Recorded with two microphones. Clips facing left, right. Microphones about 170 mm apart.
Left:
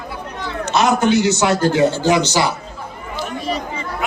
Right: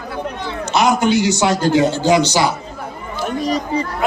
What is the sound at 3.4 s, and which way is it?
Chatter, 40° right (ahead or behind).